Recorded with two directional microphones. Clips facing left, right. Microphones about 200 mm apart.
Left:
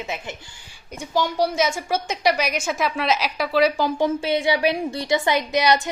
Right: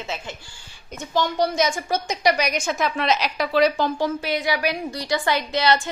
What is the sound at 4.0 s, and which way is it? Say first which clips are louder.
A woman's voice: left 3 dB; 25° left (ahead or behind).